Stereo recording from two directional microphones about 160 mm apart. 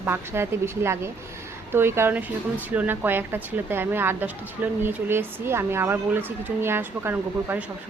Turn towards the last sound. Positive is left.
turn(degrees=-15)  # may be behind; listen again after turning